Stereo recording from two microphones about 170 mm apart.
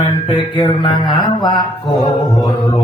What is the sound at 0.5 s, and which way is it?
Music, 30° left (ahead or behind).